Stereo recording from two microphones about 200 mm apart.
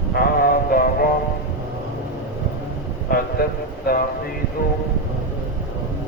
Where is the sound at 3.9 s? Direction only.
50° left (ahead or behind).